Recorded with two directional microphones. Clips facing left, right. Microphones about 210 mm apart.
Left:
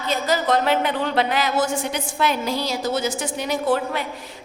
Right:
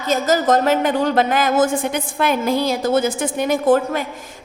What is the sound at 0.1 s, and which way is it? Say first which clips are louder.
A woman's voice: right 5 dB; 45° right (ahead or behind).